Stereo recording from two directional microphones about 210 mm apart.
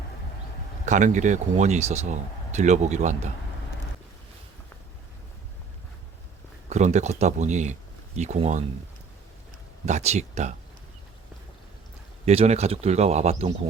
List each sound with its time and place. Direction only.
0.9 s speech: 35° right (ahead or behind)
6.7 s speech: 35° right (ahead or behind)
9.8 s speech: 30° right (ahead or behind)
12.2 s speech: 30° right (ahead or behind)